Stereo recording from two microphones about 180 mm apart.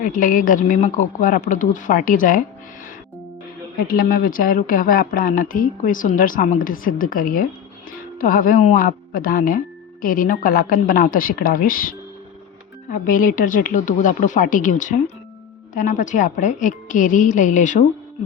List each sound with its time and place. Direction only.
0.0 s speech: 50° left (ahead or behind)
3.8 s speech: 55° left (ahead or behind)